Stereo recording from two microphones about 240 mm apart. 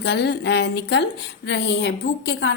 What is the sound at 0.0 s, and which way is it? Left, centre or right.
A woman's voice, left.